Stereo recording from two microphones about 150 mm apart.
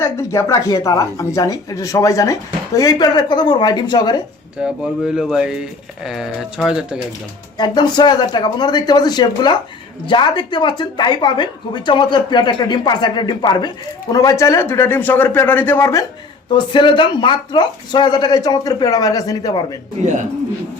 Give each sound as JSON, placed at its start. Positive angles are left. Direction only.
{"t": 0.0, "sound": "speech", "side_deg": 15}
{"t": 4.6, "sound": "speech", "side_deg": -5}
{"t": 7.6, "sound": "speech", "side_deg": 30}
{"t": 16.7, "sound": "speech", "side_deg": 30}